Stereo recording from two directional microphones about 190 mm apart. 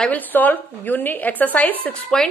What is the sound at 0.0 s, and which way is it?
A woman's voice, 10° left (ahead or behind).